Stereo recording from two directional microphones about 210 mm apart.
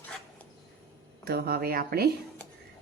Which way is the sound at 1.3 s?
50° right (ahead or behind).